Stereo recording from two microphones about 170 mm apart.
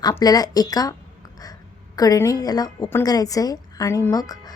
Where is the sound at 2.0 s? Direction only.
20° left (ahead or behind).